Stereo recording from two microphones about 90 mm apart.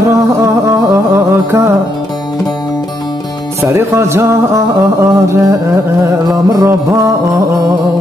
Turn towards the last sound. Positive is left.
turn(degrees=-30)  # may be behind; listen again after turning